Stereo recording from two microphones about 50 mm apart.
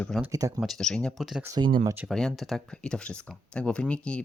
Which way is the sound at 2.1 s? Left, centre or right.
Centre.